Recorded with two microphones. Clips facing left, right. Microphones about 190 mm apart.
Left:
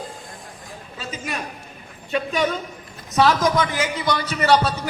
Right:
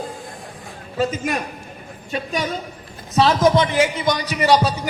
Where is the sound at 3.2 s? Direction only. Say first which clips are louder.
Right 3 dB; 25° right (ahead or behind).